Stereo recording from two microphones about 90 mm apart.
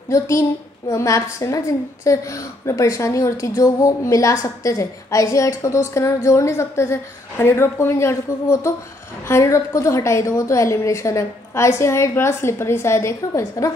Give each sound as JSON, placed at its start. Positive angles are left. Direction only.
{"t": 0.1, "sound": "a woman's voice", "side_deg": 35}